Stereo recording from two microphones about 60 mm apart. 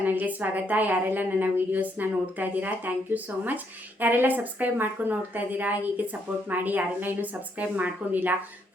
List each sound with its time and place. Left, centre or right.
0.0 s speech: right